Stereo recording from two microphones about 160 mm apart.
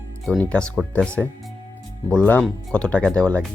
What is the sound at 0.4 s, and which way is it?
Speech, 5° left (ahead or behind).